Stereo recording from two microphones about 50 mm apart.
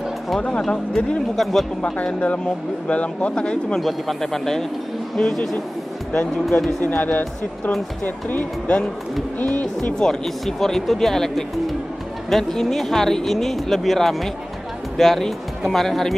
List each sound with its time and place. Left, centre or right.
0.5 s speech: centre
2.1 s speech: left
3.8 s speech: centre
6.8 s speech: left
9.9 s speech: centre